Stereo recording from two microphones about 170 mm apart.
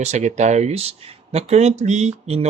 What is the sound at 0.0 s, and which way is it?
Speech, 45° right (ahead or behind).